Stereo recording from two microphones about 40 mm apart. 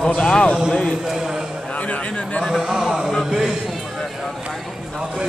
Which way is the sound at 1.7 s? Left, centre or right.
Left.